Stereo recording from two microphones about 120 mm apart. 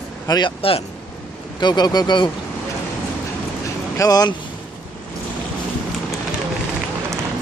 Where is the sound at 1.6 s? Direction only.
35° left (ahead or behind).